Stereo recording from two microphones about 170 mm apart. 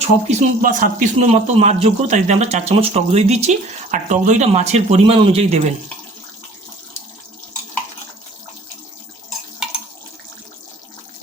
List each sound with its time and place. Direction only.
0.0 s speech: 40° right (ahead or behind)
0.6 s a man's voice: 55° right (ahead or behind); by 5.7 s 40° right (ahead or behind)